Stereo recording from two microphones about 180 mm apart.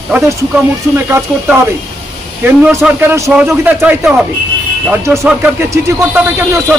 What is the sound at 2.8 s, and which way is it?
Speech, 5° right (ahead or behind).